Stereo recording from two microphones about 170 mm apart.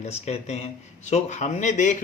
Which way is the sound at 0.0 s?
40° left (ahead or behind).